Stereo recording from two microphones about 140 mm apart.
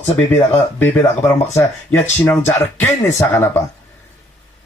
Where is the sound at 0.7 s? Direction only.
15° left (ahead or behind).